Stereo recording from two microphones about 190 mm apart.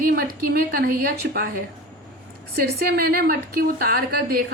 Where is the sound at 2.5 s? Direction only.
55° right (ahead or behind).